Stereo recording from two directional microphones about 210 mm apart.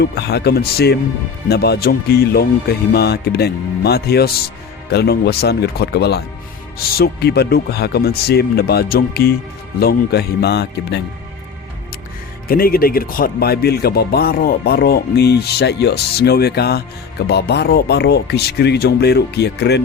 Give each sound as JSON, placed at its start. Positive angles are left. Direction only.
{"t": 0.0, "sound": "speech", "side_deg": 50}
{"t": 12.5, "sound": "speech", "side_deg": 45}